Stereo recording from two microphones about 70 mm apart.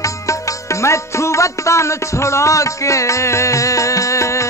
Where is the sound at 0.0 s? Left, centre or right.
Left.